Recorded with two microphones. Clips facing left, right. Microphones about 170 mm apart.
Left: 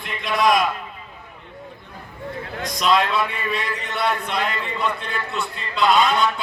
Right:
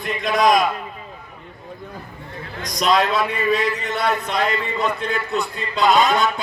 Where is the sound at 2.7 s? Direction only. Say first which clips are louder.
Right 1 dB; 40° right (ahead or behind).